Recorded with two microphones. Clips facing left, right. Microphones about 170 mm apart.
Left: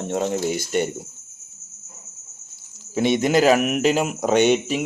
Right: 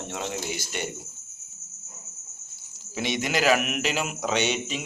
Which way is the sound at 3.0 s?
50° left (ahead or behind).